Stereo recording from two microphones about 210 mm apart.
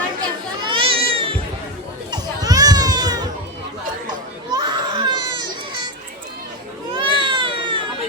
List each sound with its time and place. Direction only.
0.7 s cat: 25° right (ahead or behind)
2.0 s music: 20° right (ahead or behind)
4.5 s baby cry: 20° right (ahead or behind)
6.9 s cat: 25° right (ahead or behind)